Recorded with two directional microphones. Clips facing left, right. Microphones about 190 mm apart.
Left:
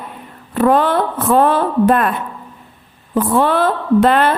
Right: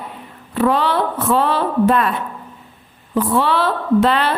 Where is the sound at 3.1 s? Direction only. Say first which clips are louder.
Left 2 dB; 50° left (ahead or behind).